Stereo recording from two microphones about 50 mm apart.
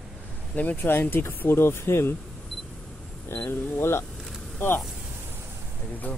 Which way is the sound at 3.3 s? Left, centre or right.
Left.